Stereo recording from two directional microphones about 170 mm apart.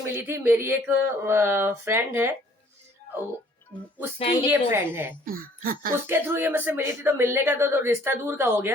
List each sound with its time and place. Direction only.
0.0 s speech: 15° right (ahead or behind)
4.4 s speech: 10° right (ahead or behind)
5.2 s speech: 55° right (ahead or behind)
6.1 s speech: 15° right (ahead or behind)